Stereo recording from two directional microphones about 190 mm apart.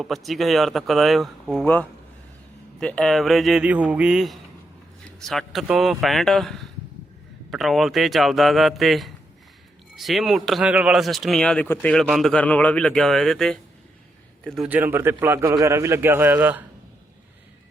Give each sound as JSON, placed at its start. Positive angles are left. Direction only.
{"t": 0.0, "sound": "a man's voice", "side_deg": 0}